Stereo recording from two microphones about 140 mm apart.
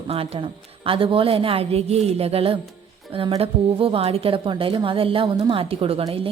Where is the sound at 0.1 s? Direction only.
40° right (ahead or behind).